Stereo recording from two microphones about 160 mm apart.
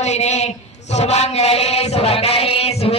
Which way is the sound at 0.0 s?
45° left (ahead or behind).